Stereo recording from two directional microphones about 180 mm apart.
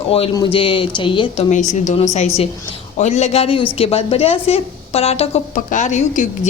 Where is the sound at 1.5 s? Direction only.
40° left (ahead or behind).